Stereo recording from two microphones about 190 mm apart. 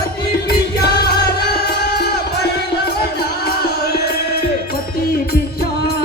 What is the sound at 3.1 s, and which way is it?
Music, 55° left (ahead or behind).